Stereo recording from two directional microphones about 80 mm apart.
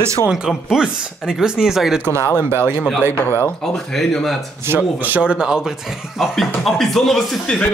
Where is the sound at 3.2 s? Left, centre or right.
Left.